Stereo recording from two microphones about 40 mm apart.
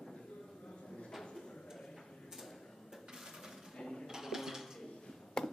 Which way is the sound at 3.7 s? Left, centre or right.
Centre.